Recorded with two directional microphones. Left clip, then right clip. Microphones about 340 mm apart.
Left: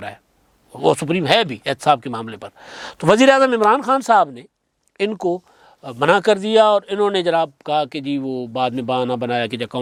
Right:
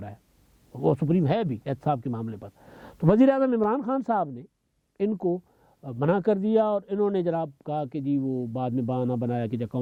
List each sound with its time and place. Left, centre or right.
0.8 s speech: centre
5.1 s speech: left
5.8 s speech: centre